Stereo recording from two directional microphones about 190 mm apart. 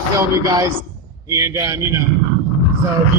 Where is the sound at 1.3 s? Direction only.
15° right (ahead or behind).